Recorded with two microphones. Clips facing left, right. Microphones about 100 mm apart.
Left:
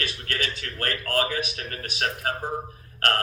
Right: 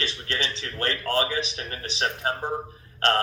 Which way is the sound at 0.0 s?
25° right (ahead or behind).